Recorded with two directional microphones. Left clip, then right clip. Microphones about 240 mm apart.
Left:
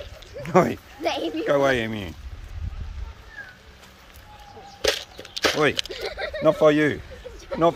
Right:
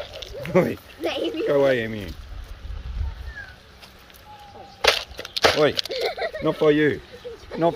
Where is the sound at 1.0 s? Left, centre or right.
Centre.